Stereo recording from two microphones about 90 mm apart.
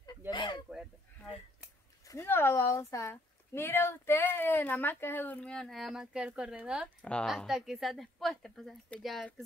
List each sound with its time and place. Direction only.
0.3 s a sound: 60° left (ahead or behind)
2.0 s speech: 30° left (ahead or behind)
5.5 s speech: 5° left (ahead or behind)